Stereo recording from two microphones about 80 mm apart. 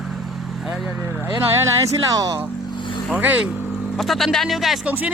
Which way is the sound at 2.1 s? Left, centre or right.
Right.